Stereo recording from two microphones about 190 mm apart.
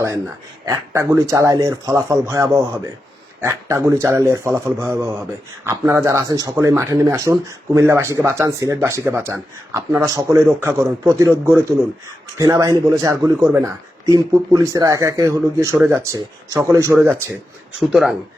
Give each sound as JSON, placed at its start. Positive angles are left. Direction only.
{"t": 0.6, "sound": "speech", "side_deg": -15}
{"t": 17.7, "sound": "speech", "side_deg": 0}